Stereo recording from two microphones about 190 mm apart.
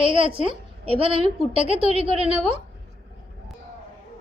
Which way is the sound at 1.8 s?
35° left (ahead or behind).